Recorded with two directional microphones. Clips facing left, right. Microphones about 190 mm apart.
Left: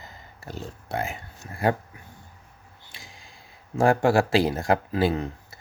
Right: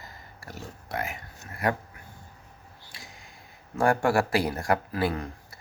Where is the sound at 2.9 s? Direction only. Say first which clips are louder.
Left 1 dB; 25° left (ahead or behind).